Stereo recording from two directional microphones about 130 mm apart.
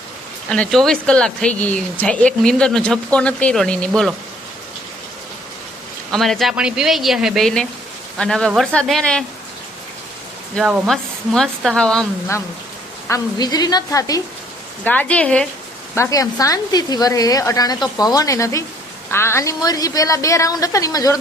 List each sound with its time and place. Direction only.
0.5 s speech: 5° left (ahead or behind)
6.1 s speech: 5° left (ahead or behind)
10.8 s speech: centre (ahead or behind)
13.1 s speech: 25° left (ahead or behind)
14.8 s speech: 10° left (ahead or behind)
16.0 s speech: 25° left (ahead or behind)